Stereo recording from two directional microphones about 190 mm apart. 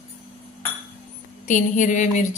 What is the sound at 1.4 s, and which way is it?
Speech, 40° left (ahead or behind).